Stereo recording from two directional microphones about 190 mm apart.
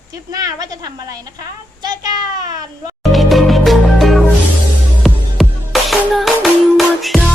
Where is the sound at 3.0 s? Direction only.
Centre (ahead or behind).